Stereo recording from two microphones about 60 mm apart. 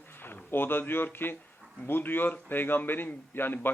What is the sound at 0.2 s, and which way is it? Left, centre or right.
A man's voice, left.